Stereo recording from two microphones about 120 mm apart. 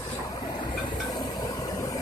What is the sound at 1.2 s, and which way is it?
Vehicle, 35° left (ahead or behind).